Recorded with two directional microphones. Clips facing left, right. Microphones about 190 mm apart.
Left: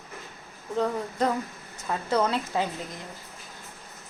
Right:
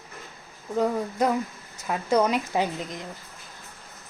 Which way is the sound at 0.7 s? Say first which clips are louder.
Right 3 dB; 10° right (ahead or behind).